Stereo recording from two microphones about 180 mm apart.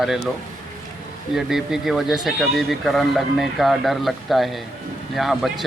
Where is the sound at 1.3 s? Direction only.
5° right (ahead or behind).